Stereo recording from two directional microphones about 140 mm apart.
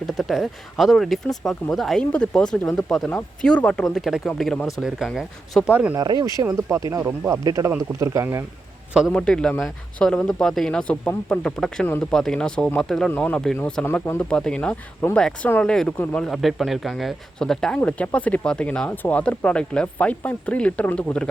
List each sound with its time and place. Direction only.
0.2 s speech: centre (ahead or behind)
6.0 s speech: 30° right (ahead or behind)
8.9 s a man's voice: 5° right (ahead or behind)
9.1 s speech: 5° left (ahead or behind)